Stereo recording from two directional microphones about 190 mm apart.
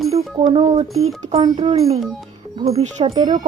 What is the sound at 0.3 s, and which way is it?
Speech, 25° right (ahead or behind).